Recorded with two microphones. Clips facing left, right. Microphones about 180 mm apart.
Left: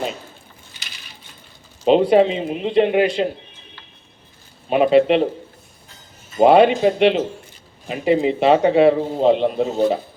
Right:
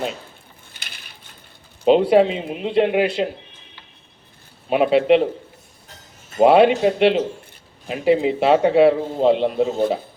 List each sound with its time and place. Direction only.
0.7 s coin: 55° right (ahead or behind)
1.9 s a man's voice: 5° right (ahead or behind)
4.7 s a man's voice: centre (ahead or behind)
6.4 s a man's voice: centre (ahead or behind)